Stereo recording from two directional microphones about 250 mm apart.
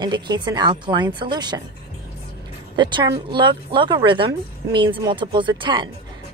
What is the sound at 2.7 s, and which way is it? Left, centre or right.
Speech, centre.